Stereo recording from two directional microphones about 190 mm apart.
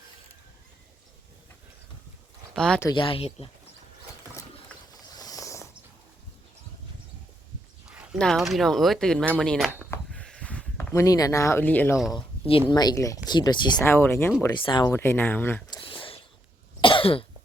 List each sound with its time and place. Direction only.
2.6 s speech: 5° left (ahead or behind)
2.8 s speech: 25° left (ahead or behind)
4.5 s a sound: 20° left (ahead or behind)
7.9 s a sound: 5° right (ahead or behind)
8.2 s speech: centre (ahead or behind)
9.9 s a sound: 5° left (ahead or behind)
12.1 s speech: 25° left (ahead or behind)
13.7 s speech: 10° left (ahead or behind)
14.6 s speech: 25° left (ahead or behind)
14.8 s speech: 10° left (ahead or behind)
15.7 s a sound: 25° left (ahead or behind)
16.8 s cough: 30° left (ahead or behind)